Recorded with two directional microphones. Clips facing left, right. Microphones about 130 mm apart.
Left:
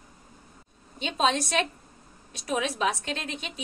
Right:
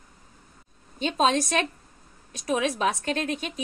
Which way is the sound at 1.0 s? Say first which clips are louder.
Right 3 dB; 45° right (ahead or behind).